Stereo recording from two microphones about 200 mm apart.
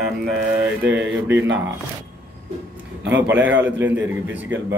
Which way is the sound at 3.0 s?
60° right (ahead or behind).